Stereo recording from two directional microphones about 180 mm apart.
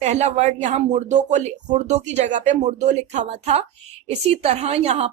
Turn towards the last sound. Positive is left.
turn(degrees=-35)  # may be behind; listen again after turning